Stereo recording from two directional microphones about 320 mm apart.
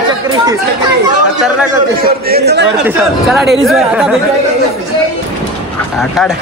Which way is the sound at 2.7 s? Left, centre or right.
Centre.